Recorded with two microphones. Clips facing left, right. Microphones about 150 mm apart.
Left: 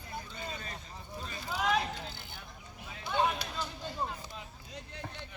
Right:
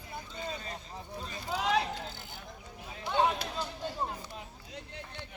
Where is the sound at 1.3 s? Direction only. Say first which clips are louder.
Even; 35° right (ahead or behind).